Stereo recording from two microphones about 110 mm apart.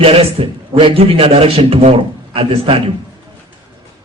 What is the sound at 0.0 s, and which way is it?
A man's voice, 60° right (ahead or behind).